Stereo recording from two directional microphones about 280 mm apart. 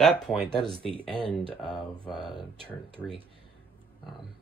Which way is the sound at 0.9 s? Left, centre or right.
Centre.